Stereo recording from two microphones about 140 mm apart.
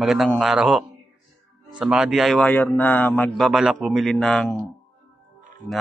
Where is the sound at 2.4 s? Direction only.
10° left (ahead or behind).